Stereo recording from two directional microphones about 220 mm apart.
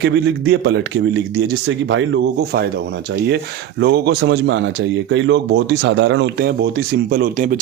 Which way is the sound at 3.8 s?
50° right (ahead or behind).